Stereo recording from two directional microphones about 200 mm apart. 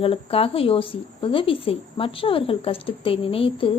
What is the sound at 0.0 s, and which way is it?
Speech, 30° left (ahead or behind).